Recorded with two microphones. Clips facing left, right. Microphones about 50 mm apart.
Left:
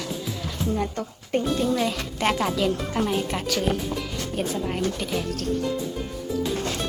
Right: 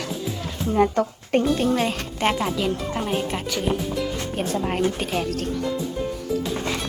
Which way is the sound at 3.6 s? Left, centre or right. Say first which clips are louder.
Right 1 dB; centre.